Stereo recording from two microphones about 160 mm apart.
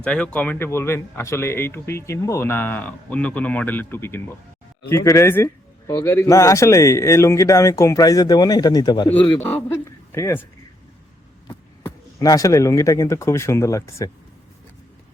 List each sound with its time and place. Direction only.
0.0 s speech: 5° left (ahead or behind); by 9.0 s 25° left (ahead or behind)
9.0 s a man's voice: 10° left (ahead or behind)
12.2 s speech: 20° left (ahead or behind)